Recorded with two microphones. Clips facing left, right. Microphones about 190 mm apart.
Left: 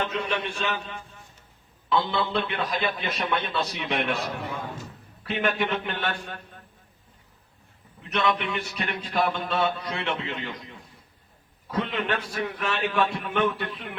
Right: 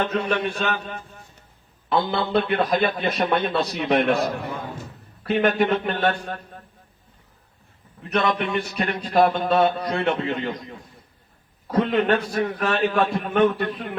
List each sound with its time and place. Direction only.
0.0 s speech: 45° right (ahead or behind)
2.0 s a man's voice: 40° right (ahead or behind)
8.2 s speech: 45° right (ahead or behind)